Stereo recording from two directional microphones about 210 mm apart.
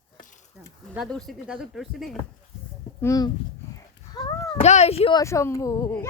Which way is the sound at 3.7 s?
20° left (ahead or behind).